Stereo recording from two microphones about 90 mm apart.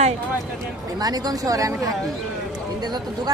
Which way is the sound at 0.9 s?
45° right (ahead or behind).